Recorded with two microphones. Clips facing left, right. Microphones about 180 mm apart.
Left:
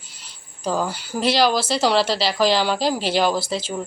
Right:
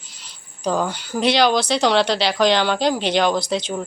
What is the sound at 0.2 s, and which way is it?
Speech, centre (ahead or behind).